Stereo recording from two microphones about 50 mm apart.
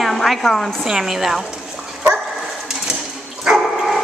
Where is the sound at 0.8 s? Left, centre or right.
Centre.